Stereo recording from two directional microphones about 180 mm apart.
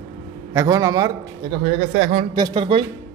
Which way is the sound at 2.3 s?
25° right (ahead or behind).